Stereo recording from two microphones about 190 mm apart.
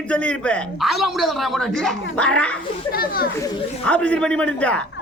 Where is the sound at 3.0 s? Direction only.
50° left (ahead or behind).